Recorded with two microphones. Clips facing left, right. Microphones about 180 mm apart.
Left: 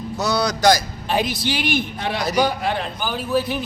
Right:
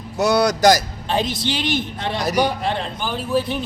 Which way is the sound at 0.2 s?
50° right (ahead or behind).